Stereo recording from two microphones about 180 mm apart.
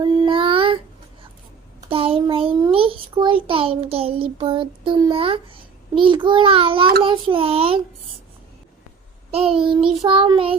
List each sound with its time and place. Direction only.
0.3 s child singing: 30° right (ahead or behind)
1.9 s a child's voice: 30° right (ahead or behind)
9.3 s child singing: 35° right (ahead or behind)
9.6 s child singing: 5° right (ahead or behind)
9.9 s a child's voice: 30° right (ahead or behind)